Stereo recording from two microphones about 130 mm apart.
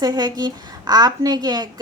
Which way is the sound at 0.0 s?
30° right (ahead or behind).